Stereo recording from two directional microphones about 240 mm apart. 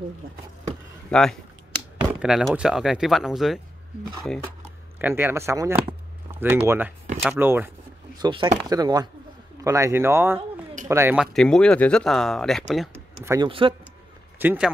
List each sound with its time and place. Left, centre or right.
1.1 s speech: centre
4.9 s speech: centre
8.2 s speech: centre
11.3 s speech: centre
13.2 s speech: centre
14.4 s speech: centre